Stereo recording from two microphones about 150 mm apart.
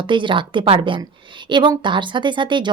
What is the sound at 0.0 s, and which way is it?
Speech, 35° right (ahead or behind).